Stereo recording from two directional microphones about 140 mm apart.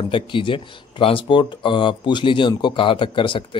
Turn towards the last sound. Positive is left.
turn(degrees=35)  # may be behind; listen again after turning